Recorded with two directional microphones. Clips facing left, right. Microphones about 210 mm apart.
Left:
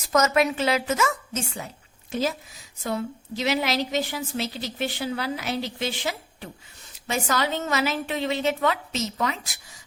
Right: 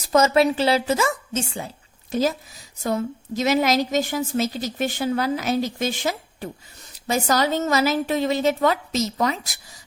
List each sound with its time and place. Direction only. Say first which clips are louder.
0.1 s a woman's voice: right 4 dB; 30° right (ahead or behind)